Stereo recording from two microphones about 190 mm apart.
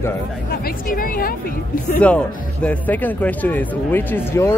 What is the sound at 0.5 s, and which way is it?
Speech, 50° left (ahead or behind).